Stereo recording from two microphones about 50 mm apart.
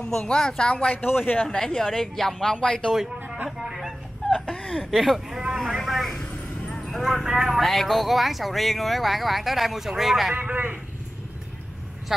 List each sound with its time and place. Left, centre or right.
0.0 s speech: centre
1.0 s speech: left
1.6 s speech: centre
1.9 s speech: centre
2.6 s speech: centre
2.9 s speech: centre
3.4 s a sound: centre
4.6 s chuckle: centre
4.9 s speech: centre
5.6 s vehicle: centre
6.9 s speech: centre
7.6 s speech: centre
10.3 s speech: right